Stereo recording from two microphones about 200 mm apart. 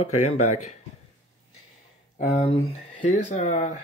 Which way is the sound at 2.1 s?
30° left (ahead or behind).